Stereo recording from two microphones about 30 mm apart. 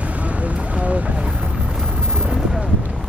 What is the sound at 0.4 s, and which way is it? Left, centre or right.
Vehicle, right.